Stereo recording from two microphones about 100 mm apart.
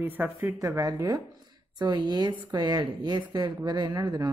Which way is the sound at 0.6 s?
35° right (ahead or behind).